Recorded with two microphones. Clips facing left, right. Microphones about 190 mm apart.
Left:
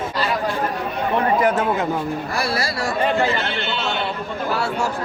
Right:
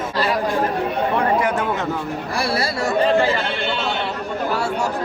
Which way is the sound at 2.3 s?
30° right (ahead or behind).